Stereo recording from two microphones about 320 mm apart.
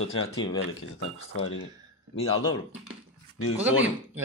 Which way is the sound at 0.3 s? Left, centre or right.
Centre.